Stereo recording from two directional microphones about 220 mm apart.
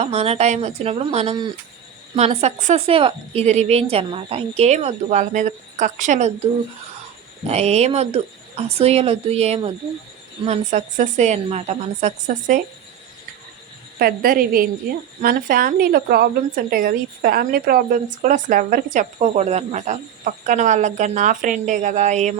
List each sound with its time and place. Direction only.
0.0 s a woman's voice: 25° right (ahead or behind)
7.4 s a woman's voice: 30° right (ahead or behind)
14.0 s a woman's voice: 40° right (ahead or behind)